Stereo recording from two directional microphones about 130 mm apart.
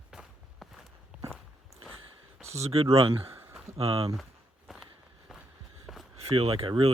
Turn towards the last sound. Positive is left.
turn(degrees=-40)  # may be behind; listen again after turning